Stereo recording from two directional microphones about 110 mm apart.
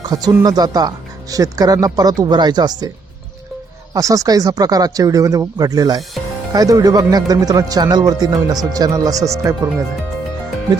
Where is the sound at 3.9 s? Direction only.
30° right (ahead or behind).